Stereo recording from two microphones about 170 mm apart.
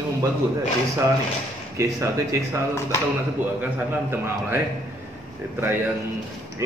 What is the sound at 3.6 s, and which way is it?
A man's voice, 15° right (ahead or behind).